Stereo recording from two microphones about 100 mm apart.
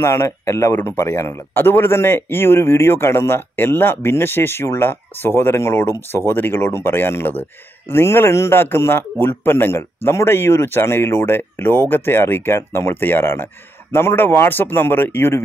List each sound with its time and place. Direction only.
0.0 s speech: 30° left (ahead or behind)